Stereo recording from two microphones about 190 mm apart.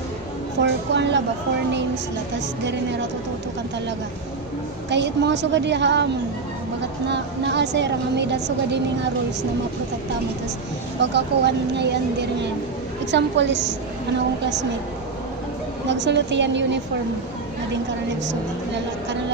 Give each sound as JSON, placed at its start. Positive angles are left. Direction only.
{"t": 0.6, "sound": "a woman's voice", "side_deg": -70}
{"t": 2.3, "sound": "a woman's voice", "side_deg": -70}
{"t": 4.8, "sound": "a woman's voice", "side_deg": -65}
{"t": 7.1, "sound": "a woman's voice", "side_deg": -65}
{"t": 11.0, "sound": "a woman's voice", "side_deg": -65}
{"t": 15.9, "sound": "a woman's voice", "side_deg": -70}